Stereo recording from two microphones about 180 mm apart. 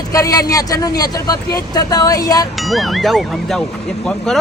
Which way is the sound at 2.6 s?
Centre (ahead or behind).